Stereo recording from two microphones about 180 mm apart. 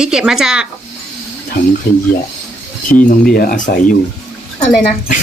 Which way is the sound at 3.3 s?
55° left (ahead or behind).